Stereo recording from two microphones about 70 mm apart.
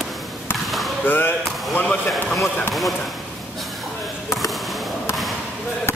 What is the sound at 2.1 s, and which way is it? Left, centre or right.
Speech, centre.